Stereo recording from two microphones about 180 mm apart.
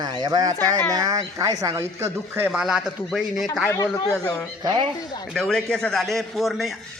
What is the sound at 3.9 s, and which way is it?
Speech, 15° left (ahead or behind).